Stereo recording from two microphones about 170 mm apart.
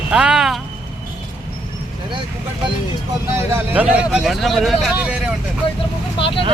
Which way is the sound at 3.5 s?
10° right (ahead or behind).